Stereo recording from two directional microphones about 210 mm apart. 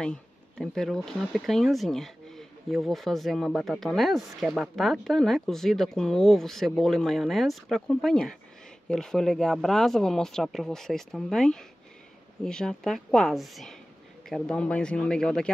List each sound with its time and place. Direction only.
0.0 s speech: 5° left (ahead or behind)